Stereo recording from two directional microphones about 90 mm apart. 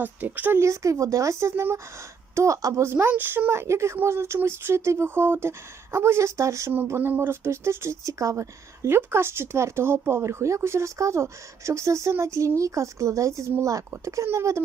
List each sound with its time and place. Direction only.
0.0 s a woman's voice: 20° right (ahead or behind)
0.6 s a woman's voice: 35° right (ahead or behind)